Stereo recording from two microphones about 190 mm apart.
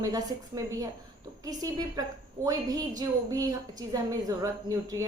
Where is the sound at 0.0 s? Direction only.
20° right (ahead or behind).